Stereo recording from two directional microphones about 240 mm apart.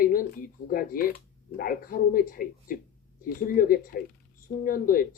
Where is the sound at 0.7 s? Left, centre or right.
Left.